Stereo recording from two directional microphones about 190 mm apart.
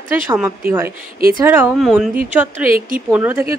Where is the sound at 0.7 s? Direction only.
10° right (ahead or behind).